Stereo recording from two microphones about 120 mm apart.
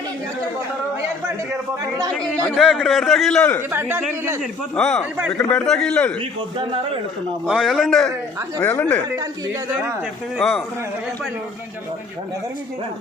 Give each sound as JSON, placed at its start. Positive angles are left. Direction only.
{"t": 2.1, "sound": "a man's voice", "side_deg": 10}
{"t": 3.7, "sound": "speech", "side_deg": -20}
{"t": 4.7, "sound": "a man's voice", "side_deg": 5}
{"t": 7.4, "sound": "a man's voice", "side_deg": -5}
{"t": 10.3, "sound": "a man's voice", "side_deg": 0}